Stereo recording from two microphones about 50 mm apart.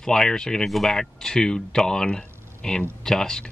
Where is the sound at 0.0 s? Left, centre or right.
Centre.